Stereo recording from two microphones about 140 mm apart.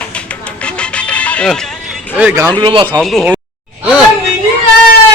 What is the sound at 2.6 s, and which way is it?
Speech, 40° right (ahead or behind).